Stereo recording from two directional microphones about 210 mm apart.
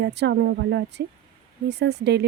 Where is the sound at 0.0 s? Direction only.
55° right (ahead or behind).